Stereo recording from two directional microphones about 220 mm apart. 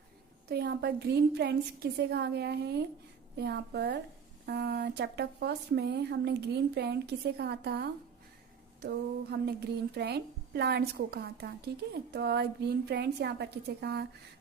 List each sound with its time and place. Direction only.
0.4 s speech: 45° right (ahead or behind)